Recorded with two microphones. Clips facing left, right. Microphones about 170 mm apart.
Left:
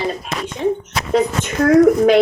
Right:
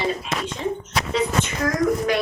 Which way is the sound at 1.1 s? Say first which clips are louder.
Left 6 dB; 50° left (ahead or behind).